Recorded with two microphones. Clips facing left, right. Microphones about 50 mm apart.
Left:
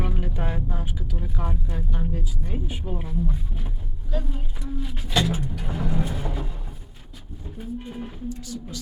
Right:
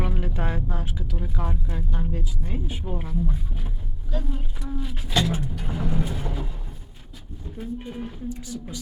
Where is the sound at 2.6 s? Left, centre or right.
Centre.